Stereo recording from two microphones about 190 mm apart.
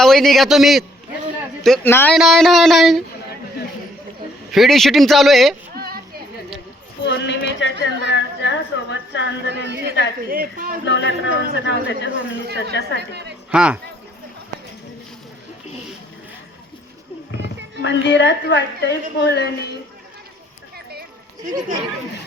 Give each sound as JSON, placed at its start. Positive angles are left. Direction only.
{"t": 0.0, "sound": "speech", "side_deg": 0}
{"t": 2.1, "sound": "speech", "side_deg": 0}
{"t": 4.5, "sound": "speech", "side_deg": 0}
{"t": 5.7, "sound": "a sound", "side_deg": -55}
{"t": 7.0, "sound": "a sound", "side_deg": 65}
{"t": 7.8, "sound": "a sound", "side_deg": -65}
{"t": 8.1, "sound": "a sound", "side_deg": 70}
{"t": 9.5, "sound": "a woman's voice", "side_deg": -65}
{"t": 10.2, "sound": "a woman's voice", "side_deg": -50}
{"t": 10.8, "sound": "speech", "side_deg": 65}
{"t": 13.5, "sound": "a man's voice", "side_deg": -5}
{"t": 17.8, "sound": "a woman's voice", "side_deg": 70}